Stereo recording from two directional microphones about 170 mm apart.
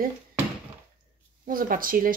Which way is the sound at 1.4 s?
55° right (ahead or behind).